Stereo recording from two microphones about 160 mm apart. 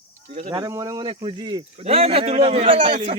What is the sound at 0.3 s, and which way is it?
Speech, 45° right (ahead or behind).